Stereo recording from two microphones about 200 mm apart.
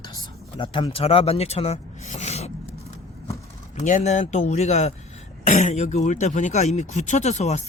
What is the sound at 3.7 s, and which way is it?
Speech, 40° left (ahead or behind).